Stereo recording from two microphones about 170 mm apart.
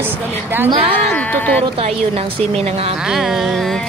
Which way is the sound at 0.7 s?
30° right (ahead or behind).